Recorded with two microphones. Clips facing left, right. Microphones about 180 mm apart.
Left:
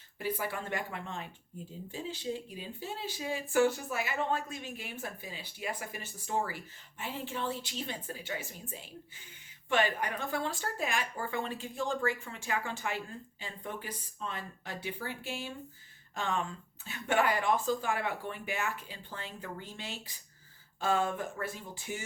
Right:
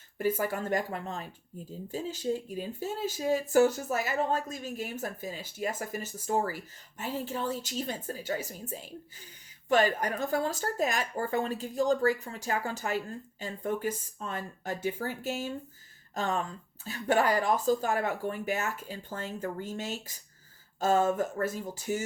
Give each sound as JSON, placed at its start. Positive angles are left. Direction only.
{"t": 0.2, "sound": "speech", "side_deg": -45}